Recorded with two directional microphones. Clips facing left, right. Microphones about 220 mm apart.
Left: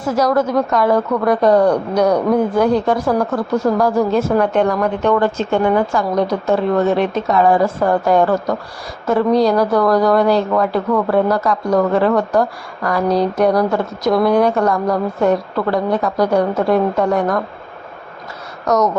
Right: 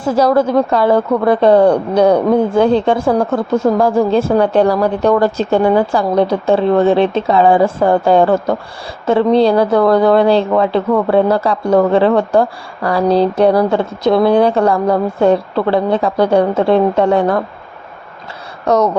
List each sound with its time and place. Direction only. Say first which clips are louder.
0.0 s speech: right 4 dB; 30° right (ahead or behind)
18.6 s speech: right 3 dB; 30° right (ahead or behind)